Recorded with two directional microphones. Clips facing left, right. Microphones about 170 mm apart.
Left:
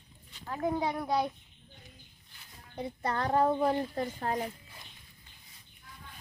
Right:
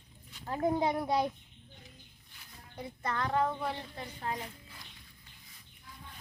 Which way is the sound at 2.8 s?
35° left (ahead or behind).